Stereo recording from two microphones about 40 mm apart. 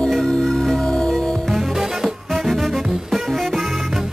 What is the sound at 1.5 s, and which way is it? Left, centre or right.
Music, centre.